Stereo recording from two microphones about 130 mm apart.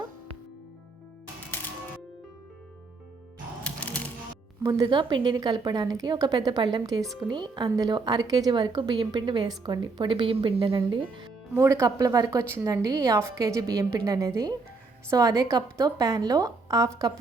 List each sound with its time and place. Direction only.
3.6 s music: 10° left (ahead or behind)
4.6 s a woman's voice: 25° right (ahead or behind)
4.9 s a woman's voice: 40° right (ahead or behind)
11.5 s a woman's voice: 20° right (ahead or behind)